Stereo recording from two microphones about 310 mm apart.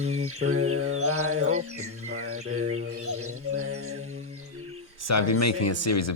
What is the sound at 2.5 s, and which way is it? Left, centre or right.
Mantra, right.